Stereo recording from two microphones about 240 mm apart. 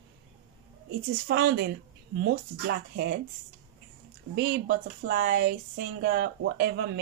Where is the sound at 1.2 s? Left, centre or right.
Right.